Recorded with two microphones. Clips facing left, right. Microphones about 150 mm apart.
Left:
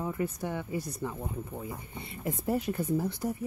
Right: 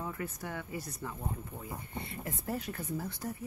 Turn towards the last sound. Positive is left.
turn(degrees=15)  # may be behind; listen again after turning